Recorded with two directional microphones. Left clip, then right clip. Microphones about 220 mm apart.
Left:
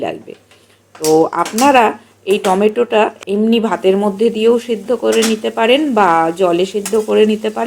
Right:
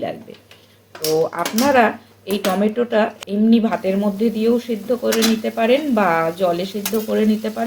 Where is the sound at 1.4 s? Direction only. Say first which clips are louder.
Left 5 dB; 25° left (ahead or behind).